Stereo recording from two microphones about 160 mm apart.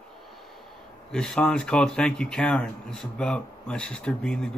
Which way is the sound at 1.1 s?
5° left (ahead or behind).